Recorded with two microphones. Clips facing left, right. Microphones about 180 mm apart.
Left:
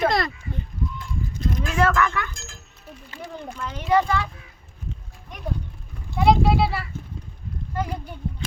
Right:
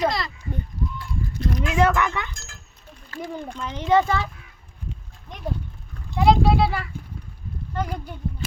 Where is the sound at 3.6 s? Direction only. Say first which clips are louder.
Right 1 dB; 20° right (ahead or behind).